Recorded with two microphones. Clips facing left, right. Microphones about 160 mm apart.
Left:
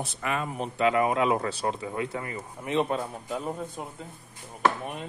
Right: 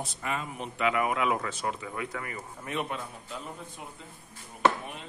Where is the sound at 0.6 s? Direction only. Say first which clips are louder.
Left 5 dB; 35° left (ahead or behind).